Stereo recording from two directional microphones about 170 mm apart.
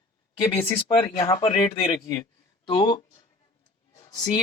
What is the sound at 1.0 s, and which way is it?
A man's voice, 30° left (ahead or behind).